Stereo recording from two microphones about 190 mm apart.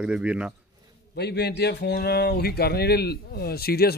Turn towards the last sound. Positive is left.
turn(degrees=55)  # may be behind; listen again after turning